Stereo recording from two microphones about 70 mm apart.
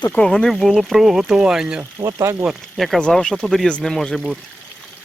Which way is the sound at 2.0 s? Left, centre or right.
Right.